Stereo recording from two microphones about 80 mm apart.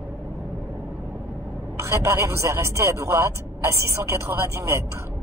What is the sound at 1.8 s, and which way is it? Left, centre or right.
A man's voice, right.